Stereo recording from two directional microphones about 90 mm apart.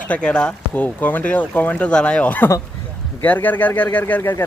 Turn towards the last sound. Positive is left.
turn(degrees=20)  # may be behind; listen again after turning